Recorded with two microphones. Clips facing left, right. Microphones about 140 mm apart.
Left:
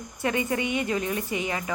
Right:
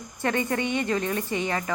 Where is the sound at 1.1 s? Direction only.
35° right (ahead or behind).